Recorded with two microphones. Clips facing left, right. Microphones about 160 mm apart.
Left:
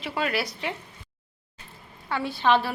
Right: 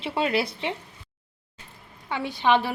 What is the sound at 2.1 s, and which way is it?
Speech, 15° right (ahead or behind).